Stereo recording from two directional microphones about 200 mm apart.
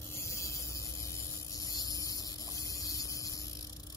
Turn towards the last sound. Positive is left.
turn(degrees=15)  # may be behind; listen again after turning